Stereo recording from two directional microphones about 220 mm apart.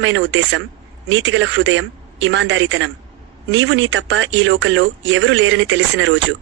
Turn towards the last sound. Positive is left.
turn(degrees=-60)  # may be behind; listen again after turning